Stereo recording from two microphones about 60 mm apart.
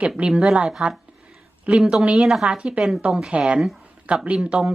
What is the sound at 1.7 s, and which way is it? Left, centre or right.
A woman's voice, centre.